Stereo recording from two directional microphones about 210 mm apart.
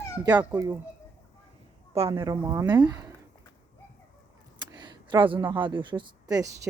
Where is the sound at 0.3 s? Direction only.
10° right (ahead or behind).